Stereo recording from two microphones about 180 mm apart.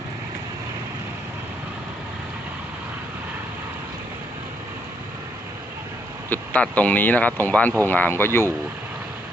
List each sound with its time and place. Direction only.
6.3 s speech: 10° left (ahead or behind)